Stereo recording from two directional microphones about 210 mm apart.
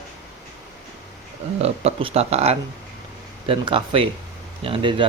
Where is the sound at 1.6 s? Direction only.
30° right (ahead or behind).